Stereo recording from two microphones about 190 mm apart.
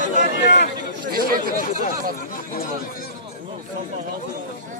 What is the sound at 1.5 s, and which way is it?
Speech, 45° left (ahead or behind).